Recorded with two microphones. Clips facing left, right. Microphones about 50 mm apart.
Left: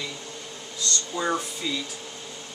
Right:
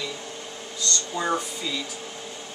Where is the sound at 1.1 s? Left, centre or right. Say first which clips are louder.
Even; centre.